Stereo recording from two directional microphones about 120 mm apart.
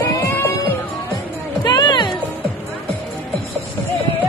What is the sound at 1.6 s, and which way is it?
Music, 40° left (ahead or behind).